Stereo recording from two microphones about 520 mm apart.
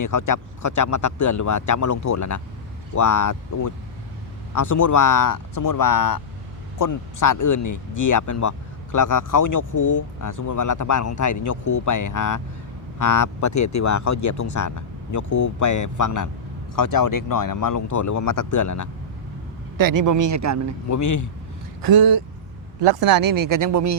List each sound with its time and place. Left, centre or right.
0.0 s speech: left
19.7 s speech: right
20.8 s speech: left
21.8 s speech: right